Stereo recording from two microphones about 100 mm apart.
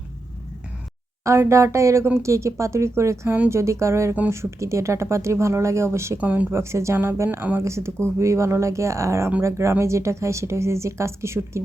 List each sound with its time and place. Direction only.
1.2 s speech: 30° right (ahead or behind)
3.2 s speech: 15° right (ahead or behind)
3.6 s speech: 30° right (ahead or behind)
6.1 s speech: 15° right (ahead or behind)